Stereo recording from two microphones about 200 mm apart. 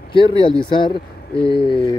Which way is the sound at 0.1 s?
25° left (ahead or behind).